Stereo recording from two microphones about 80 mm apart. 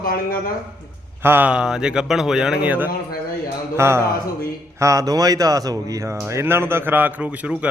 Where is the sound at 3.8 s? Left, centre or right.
Right.